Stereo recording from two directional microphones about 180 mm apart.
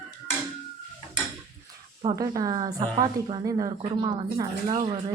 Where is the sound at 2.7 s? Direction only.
30° right (ahead or behind).